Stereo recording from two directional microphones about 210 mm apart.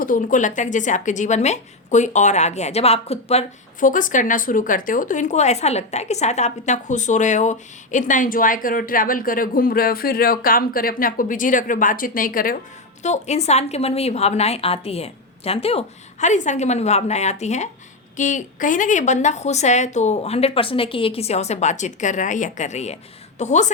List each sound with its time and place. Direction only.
0.0 s a woman's voice: 40° left (ahead or behind)